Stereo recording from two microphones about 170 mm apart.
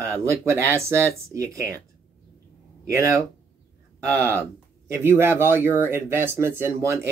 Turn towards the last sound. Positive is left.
turn(degrees=-15)  # may be behind; listen again after turning